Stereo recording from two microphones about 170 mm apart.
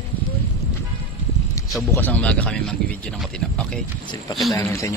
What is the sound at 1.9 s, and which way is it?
Speech, 10° left (ahead or behind).